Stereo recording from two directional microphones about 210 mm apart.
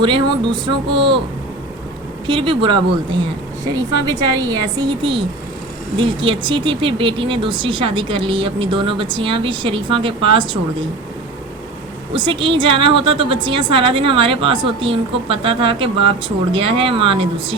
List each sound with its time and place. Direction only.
0.0 s speech: 20° right (ahead or behind)
2.2 s speech: 25° right (ahead or behind)
4.4 s speech: 20° right (ahead or behind)
12.1 s speech: 25° right (ahead or behind)